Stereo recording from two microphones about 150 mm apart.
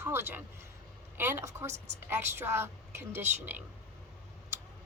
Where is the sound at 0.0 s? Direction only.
15° right (ahead or behind).